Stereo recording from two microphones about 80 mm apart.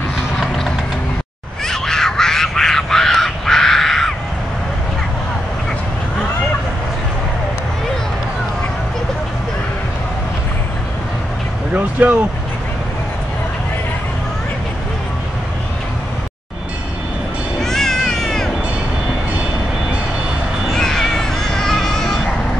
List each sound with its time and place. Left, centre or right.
0.4 s a sound: centre
1.7 s crow: centre
11.7 s vehicle: centre
17.6 s cat: centre
20.7 s cat: centre